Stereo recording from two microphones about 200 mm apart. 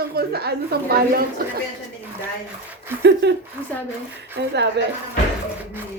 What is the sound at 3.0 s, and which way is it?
Speech, 60° right (ahead or behind).